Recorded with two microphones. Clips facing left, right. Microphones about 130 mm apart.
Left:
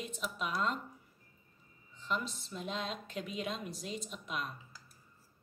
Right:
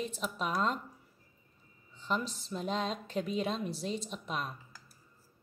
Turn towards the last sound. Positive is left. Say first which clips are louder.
# right 3 dB
turn(degrees=-30)  # may be behind; listen again after turning